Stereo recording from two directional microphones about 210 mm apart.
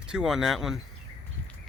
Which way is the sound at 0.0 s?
5° right (ahead or behind).